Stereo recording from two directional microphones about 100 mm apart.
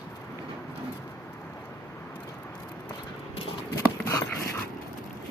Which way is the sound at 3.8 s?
30° left (ahead or behind).